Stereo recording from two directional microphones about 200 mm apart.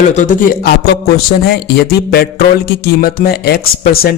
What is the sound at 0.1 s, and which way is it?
Speech, 40° left (ahead or behind).